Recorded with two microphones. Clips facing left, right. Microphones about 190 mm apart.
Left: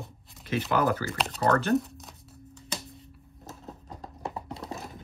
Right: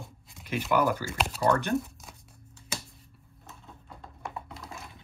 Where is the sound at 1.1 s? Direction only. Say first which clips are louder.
Even; centre (ahead or behind).